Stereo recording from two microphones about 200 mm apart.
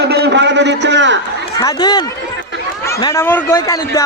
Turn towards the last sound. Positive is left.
turn(degrees=15)  # may be behind; listen again after turning